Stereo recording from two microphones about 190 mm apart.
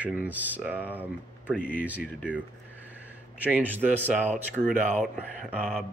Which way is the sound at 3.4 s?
10° right (ahead or behind).